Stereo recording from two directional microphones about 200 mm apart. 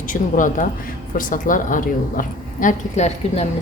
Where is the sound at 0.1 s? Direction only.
40° left (ahead or behind).